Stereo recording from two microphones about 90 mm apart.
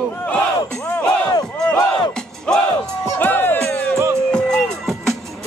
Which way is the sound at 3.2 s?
20° left (ahead or behind).